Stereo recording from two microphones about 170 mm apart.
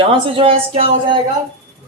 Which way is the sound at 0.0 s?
35° right (ahead or behind).